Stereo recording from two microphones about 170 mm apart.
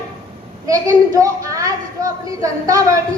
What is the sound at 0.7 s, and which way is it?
A woman's voice, 20° right (ahead or behind).